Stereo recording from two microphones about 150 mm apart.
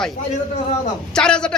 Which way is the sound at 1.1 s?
5° left (ahead or behind).